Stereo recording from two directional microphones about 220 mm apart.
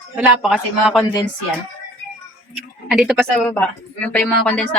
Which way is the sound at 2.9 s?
Centre (ahead or behind).